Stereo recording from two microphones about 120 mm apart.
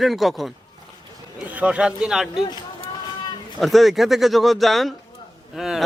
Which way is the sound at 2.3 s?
40° left (ahead or behind).